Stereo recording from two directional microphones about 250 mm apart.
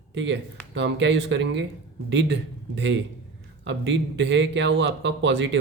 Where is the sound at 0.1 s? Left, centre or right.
Right.